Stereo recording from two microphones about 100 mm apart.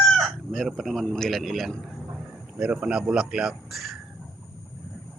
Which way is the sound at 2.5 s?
10° right (ahead or behind).